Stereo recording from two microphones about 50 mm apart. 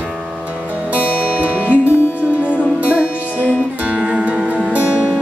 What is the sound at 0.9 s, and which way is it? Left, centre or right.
Music, right.